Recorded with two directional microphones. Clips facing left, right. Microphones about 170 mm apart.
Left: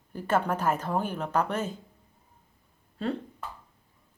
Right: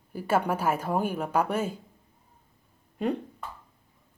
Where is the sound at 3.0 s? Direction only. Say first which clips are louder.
Right 3 dB; 15° right (ahead or behind).